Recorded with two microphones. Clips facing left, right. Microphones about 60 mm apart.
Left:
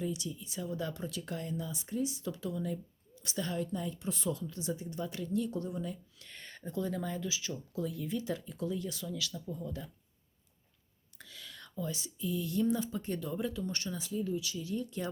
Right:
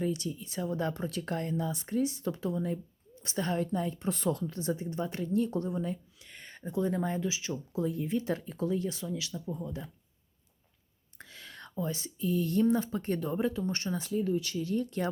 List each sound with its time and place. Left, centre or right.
0.0 s a woman's voice: right
6.1 s speech: centre
11.2 s speech: right
14.0 s speech: right